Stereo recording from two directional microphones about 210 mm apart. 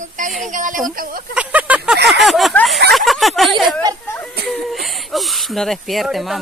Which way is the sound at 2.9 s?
Centre (ahead or behind).